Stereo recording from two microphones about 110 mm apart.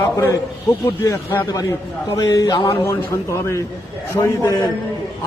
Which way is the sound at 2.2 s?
35° left (ahead or behind).